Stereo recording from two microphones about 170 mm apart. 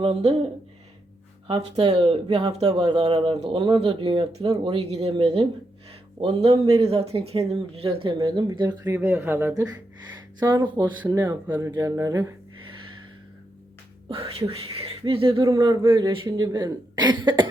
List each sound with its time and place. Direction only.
0.0 s speech: 40° right (ahead or behind)
2.0 s speech: 35° right (ahead or behind)
2.7 s speech: 30° right (ahead or behind)
8.8 s speech: 10° right (ahead or behind)
14.1 s speech: 35° right (ahead or behind)
15.4 s speech: 20° right (ahead or behind)